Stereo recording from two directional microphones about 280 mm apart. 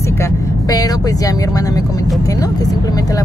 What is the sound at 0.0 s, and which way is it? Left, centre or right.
Speech, centre.